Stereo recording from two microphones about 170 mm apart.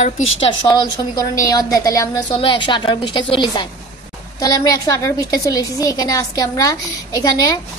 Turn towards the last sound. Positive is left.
turn(degrees=20)  # may be behind; listen again after turning